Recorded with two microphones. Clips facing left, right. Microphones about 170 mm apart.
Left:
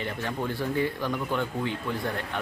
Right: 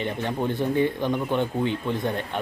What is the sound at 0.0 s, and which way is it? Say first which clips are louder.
A man's voice: right 4 dB; 20° right (ahead or behind).